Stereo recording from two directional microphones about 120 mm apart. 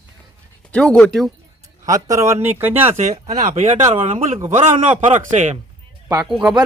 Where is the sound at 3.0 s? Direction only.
70° right (ahead or behind).